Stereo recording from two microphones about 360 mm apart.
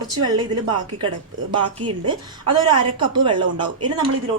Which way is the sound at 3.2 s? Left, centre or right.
Centre.